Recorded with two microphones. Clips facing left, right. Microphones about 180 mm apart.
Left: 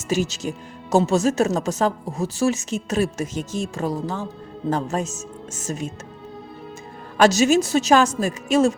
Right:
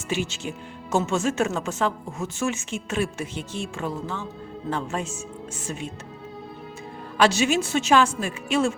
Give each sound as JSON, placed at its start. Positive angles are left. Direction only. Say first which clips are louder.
{"t": 0.1, "sound": "a woman's voice", "louder": "left 5 dB", "side_deg": 40}
{"t": 7.2, "sound": "a woman's voice", "louder": "left 5 dB", "side_deg": 40}